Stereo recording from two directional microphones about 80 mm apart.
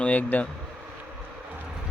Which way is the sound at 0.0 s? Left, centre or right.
Centre.